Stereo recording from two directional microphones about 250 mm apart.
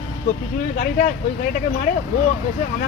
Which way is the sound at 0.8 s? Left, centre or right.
Left.